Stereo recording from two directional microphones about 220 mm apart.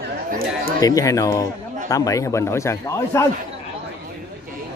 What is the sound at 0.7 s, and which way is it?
Speech, 15° left (ahead or behind).